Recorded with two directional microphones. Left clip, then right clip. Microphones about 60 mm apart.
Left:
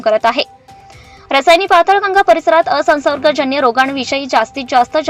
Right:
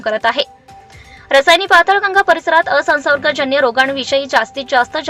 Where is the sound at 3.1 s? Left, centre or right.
Left.